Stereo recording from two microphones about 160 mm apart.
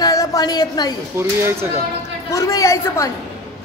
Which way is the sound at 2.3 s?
20° left (ahead or behind).